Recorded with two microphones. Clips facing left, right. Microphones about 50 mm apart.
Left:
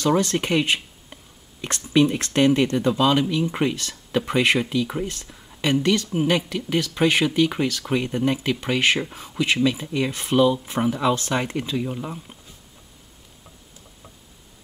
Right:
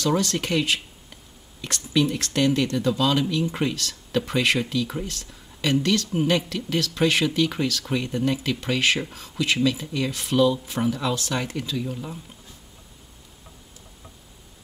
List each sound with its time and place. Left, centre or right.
0.0 s speech: centre